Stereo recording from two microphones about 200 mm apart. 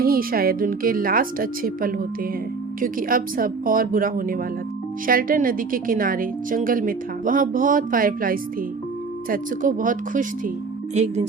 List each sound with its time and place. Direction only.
0.0 s a woman's voice: 45° right (ahead or behind)